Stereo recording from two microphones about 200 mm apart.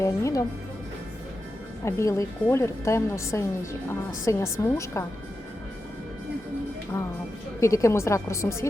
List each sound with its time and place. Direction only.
0.0 s a woman's voice: 15° left (ahead or behind)
1.8 s a woman's voice: 15° left (ahead or behind)
6.9 s a woman's voice: 10° left (ahead or behind)